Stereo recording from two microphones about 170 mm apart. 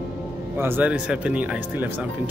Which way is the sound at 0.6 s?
10° right (ahead or behind).